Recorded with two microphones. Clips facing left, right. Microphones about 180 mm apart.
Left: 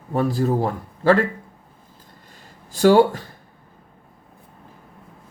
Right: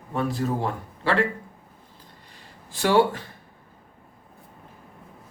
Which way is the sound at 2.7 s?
40° left (ahead or behind).